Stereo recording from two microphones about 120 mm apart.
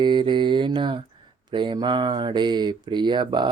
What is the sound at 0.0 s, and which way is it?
Speech, 40° right (ahead or behind).